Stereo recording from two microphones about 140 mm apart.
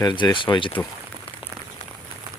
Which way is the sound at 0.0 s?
30° left (ahead or behind).